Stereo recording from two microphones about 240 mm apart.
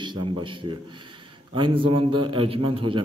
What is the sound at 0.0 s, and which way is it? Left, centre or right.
A man's voice, centre.